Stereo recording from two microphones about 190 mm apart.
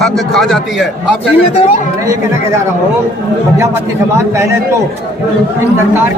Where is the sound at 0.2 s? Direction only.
Centre (ahead or behind).